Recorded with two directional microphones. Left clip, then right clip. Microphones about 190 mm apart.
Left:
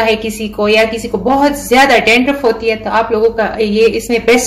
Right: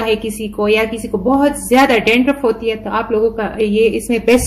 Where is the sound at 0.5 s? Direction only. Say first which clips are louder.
Left 4 dB; 35° right (ahead or behind).